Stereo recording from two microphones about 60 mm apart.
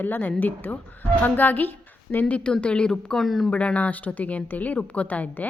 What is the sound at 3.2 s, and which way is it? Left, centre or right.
Speech, centre.